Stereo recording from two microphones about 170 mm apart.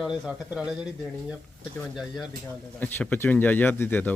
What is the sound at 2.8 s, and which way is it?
Speech, 10° left (ahead or behind).